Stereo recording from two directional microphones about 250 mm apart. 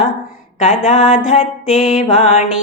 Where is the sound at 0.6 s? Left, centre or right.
Left.